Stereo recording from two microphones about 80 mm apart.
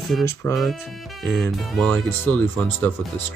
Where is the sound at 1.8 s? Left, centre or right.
Centre.